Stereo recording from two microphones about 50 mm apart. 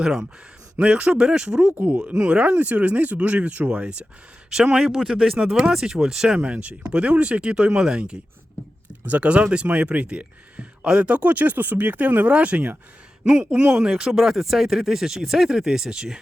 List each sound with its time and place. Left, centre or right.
0.0 s speech: centre
0.8 s speech: right
9.0 s speech: right
13.2 s speech: centre
13.9 s speech: centre